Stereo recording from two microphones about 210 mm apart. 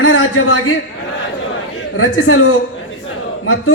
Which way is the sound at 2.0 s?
80° left.